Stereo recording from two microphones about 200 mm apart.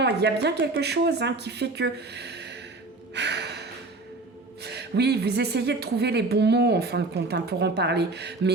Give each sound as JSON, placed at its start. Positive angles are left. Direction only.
{"t": 0.0, "sound": "speech", "side_deg": -55}
{"t": 3.2, "sound": "gasp", "side_deg": -55}
{"t": 4.6, "sound": "speech", "side_deg": -55}